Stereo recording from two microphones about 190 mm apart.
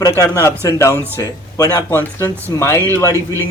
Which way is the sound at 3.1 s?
15° right (ahead or behind).